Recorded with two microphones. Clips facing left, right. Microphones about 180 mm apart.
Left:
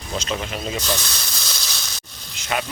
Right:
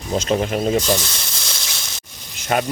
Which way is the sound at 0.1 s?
45° right (ahead or behind).